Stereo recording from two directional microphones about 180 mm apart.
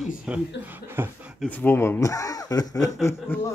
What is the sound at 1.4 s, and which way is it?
Speech, 10° left (ahead or behind).